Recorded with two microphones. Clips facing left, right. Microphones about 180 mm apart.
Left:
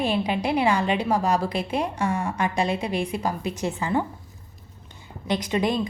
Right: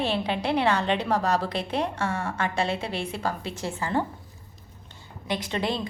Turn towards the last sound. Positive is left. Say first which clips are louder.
# left 4 dB
turn(degrees=20)  # may be behind; listen again after turning